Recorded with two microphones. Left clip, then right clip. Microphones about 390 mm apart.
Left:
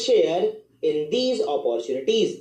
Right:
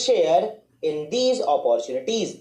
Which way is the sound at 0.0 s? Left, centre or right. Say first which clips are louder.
Right 1 dB; right.